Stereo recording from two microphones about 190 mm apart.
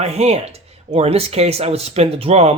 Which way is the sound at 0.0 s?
35° right (ahead or behind).